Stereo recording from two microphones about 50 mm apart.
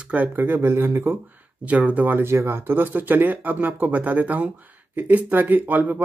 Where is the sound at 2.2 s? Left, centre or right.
Right.